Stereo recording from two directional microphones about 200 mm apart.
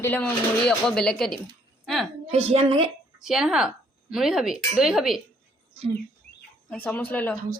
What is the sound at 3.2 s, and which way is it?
A woman's voice, 5° right (ahead or behind).